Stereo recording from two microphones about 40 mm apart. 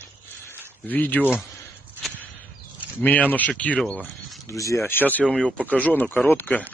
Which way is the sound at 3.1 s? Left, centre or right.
Left.